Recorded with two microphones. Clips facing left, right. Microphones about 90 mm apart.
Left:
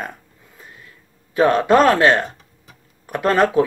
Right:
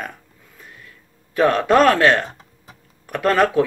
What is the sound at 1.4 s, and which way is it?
Speech, 10° left (ahead or behind).